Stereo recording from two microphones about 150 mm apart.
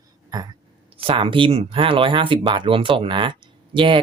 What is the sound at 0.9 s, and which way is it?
Speech, 35° right (ahead or behind).